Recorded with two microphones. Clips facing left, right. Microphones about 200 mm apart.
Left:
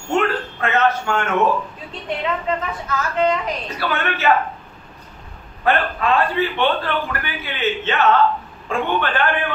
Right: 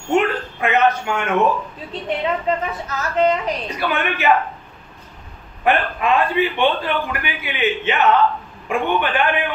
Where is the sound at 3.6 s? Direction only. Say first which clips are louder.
Right 1 dB; 15° right (ahead or behind).